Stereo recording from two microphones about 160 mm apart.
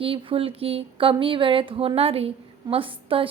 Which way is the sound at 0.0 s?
35° right (ahead or behind).